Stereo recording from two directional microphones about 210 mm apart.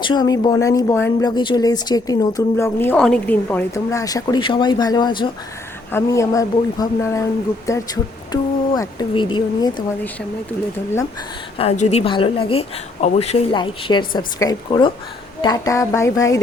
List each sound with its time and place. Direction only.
0.0 s a woman's voice: 20° left (ahead or behind)
11.5 s a woman's voice: 30° left (ahead or behind)